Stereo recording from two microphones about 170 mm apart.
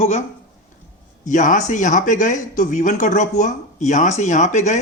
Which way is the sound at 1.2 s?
50° left (ahead or behind).